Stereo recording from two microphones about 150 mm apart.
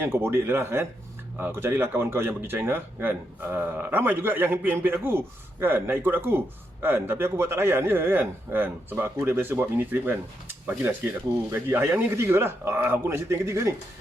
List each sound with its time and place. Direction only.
0.0 s a man's voice: 15° right (ahead or behind)